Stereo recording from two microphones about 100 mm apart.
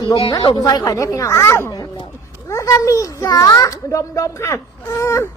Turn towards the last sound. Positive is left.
turn(degrees=30)  # may be behind; listen again after turning